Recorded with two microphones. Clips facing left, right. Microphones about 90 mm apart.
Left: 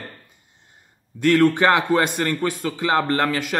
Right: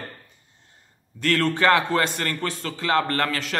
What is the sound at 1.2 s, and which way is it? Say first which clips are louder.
A man's voice: left 5 dB; 20° left (ahead or behind).